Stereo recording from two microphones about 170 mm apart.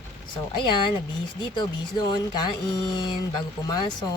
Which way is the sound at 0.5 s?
30° left (ahead or behind).